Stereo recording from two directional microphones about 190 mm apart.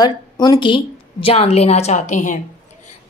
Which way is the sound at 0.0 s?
20° left (ahead or behind).